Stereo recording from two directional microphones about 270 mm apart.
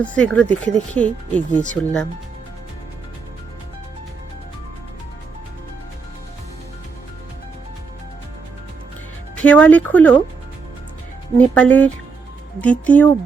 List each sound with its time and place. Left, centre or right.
0.0 s speech: centre
9.3 s speech: centre
11.3 s speech: centre